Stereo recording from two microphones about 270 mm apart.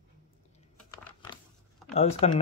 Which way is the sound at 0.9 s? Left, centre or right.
Centre.